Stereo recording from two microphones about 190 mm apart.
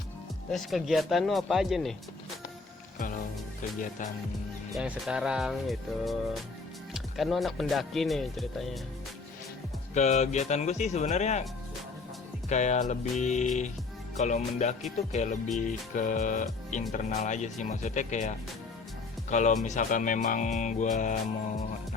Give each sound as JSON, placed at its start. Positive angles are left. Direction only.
{"t": 0.5, "sound": "speech", "side_deg": 0}
{"t": 4.7, "sound": "speech", "side_deg": -5}
{"t": 9.9, "sound": "speech", "side_deg": 35}
{"t": 12.5, "sound": "speech", "side_deg": 40}